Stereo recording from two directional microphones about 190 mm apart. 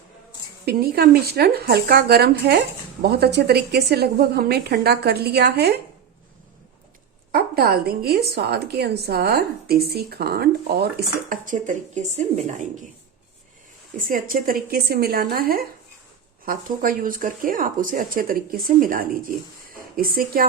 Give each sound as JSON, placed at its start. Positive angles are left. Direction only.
{"t": 0.6, "sound": "a woman's voice", "side_deg": -55}
{"t": 7.3, "sound": "a woman's voice", "side_deg": -50}
{"t": 11.3, "sound": "speech", "side_deg": -45}
{"t": 13.9, "sound": "speech", "side_deg": -45}